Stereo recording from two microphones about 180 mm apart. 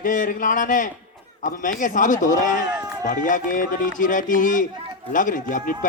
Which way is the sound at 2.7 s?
5° right (ahead or behind).